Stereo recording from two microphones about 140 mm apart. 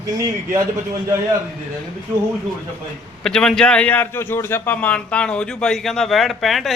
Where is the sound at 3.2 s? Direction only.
5° left (ahead or behind).